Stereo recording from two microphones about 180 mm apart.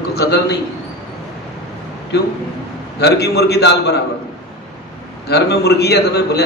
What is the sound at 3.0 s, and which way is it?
A man's voice, 65° left (ahead or behind).